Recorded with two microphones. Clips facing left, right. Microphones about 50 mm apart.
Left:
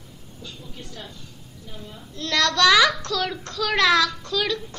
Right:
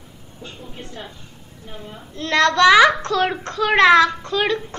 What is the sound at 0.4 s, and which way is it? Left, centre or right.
A woman's voice, right.